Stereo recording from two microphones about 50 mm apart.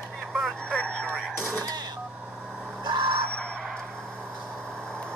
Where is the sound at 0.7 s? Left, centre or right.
Centre.